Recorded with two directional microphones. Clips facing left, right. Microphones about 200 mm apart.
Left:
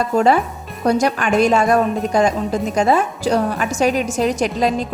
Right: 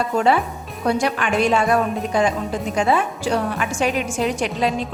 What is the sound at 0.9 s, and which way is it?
A woman's voice, 40° left (ahead or behind).